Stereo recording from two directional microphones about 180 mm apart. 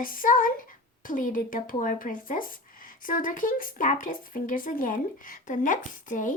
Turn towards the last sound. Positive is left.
turn(degrees=45)  # may be behind; listen again after turning